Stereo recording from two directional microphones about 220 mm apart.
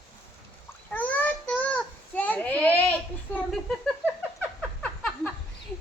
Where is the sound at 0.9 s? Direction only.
5° left (ahead or behind).